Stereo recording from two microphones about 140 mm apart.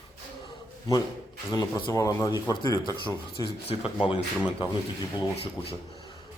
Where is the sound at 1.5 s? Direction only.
25° left (ahead or behind).